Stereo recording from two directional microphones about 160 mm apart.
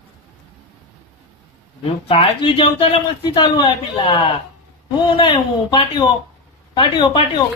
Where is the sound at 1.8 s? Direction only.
35° left (ahead or behind).